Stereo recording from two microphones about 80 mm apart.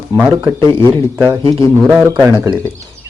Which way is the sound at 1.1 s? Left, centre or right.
Right.